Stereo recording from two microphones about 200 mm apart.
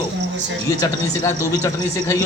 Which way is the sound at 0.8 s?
15° left (ahead or behind).